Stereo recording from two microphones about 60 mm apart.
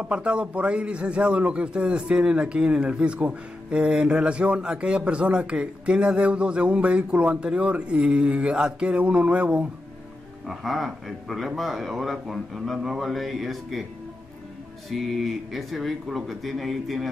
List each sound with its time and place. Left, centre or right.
0.0 s a man's voice: centre
10.4 s speech: centre
14.9 s speech: centre